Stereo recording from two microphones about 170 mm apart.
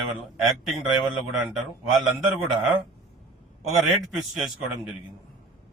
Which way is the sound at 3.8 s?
Centre (ahead or behind).